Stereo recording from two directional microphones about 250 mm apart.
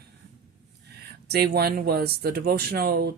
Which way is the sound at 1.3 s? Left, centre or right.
Right.